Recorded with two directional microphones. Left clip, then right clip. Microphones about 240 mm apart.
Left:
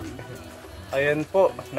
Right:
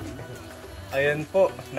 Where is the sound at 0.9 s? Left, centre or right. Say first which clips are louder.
Left 1 dB; centre.